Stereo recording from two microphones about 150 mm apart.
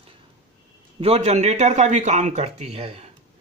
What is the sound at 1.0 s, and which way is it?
Speech, 45° right (ahead or behind).